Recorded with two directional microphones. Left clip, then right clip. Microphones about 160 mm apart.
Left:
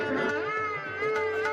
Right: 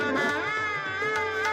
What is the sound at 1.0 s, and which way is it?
Music, 60° right (ahead or behind).